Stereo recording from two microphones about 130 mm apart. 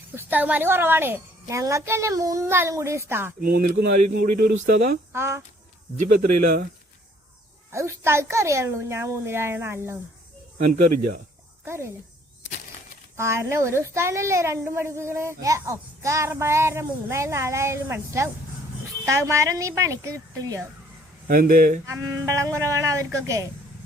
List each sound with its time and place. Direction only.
0.2 s speech: 15° right (ahead or behind)
4.2 s speech: 90° right
5.1 s speech: 20° right (ahead or behind)
7.7 s speech: 20° right (ahead or behind)
10.6 s speech: 90° right
11.6 s speech: 20° right (ahead or behind)
13.1 s speech: 20° right (ahead or behind)
21.2 s speech: 90° right
21.8 s speech: 25° right (ahead or behind)